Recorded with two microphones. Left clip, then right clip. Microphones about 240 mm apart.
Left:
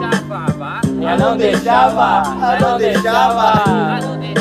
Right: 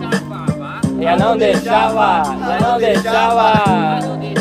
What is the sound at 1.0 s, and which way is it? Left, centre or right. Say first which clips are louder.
Music: right 2 dB; right.